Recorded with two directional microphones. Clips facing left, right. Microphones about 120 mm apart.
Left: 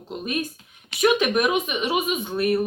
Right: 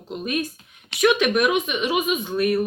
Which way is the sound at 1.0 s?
35° left (ahead or behind).